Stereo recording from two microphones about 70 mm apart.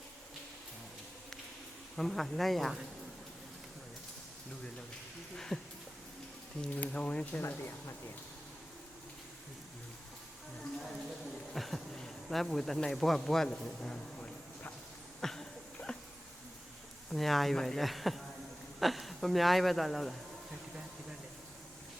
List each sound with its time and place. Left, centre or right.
2.0 s speech: centre
5.5 s speech: centre
6.7 s speech: left
7.4 s speech: left
11.5 s speech: centre
15.2 s a sound: centre
17.1 s speech: centre